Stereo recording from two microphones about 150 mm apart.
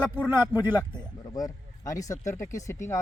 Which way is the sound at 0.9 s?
25° left (ahead or behind).